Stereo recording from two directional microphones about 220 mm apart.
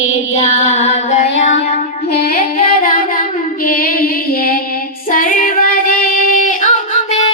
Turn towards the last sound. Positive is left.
turn(degrees=35)  # may be behind; listen again after turning